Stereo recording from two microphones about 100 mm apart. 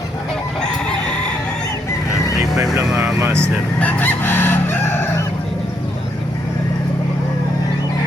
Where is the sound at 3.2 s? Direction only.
25° right (ahead or behind).